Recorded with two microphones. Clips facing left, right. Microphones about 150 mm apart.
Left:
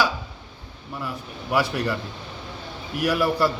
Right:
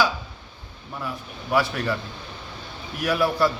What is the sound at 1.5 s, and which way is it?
Speech, 10° left (ahead or behind).